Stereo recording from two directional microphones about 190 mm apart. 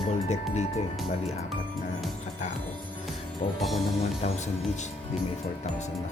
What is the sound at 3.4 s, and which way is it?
Speech, 30° left (ahead or behind).